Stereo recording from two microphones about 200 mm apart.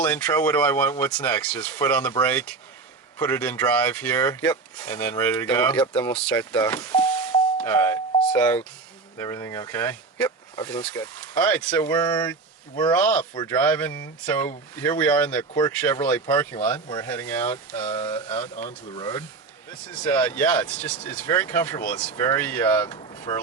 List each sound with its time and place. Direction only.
0.0 s speech: 10° left (ahead or behind)
11.8 s speech: 20° left (ahead or behind)
12.9 s speech: 10° left (ahead or behind)
18.9 s speech: 20° left (ahead or behind)
20.1 s speech: 10° left (ahead or behind)
22.9 s a sound: 20° left (ahead or behind)